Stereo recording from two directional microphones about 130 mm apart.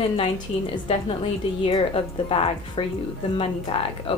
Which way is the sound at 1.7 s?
40° left (ahead or behind).